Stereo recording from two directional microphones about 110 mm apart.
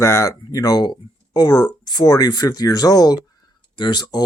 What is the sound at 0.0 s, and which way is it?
Speech, 25° left (ahead or behind).